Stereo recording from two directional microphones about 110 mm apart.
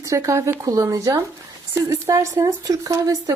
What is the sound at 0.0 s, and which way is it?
Speech, 30° right (ahead or behind).